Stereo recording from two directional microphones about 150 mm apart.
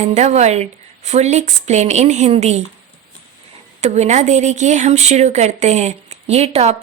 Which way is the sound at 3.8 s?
50° right (ahead or behind).